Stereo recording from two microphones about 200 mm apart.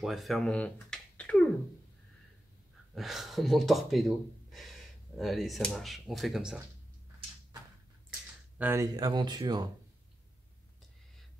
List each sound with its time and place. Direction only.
0.0 s speech: centre (ahead or behind)
2.9 s speech: centre (ahead or behind)
8.5 s speech: 10° right (ahead or behind)